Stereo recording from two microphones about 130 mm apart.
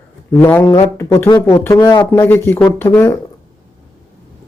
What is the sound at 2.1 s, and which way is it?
Speech, 15° left (ahead or behind).